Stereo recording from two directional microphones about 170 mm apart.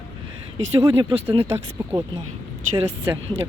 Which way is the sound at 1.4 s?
15° right (ahead or behind).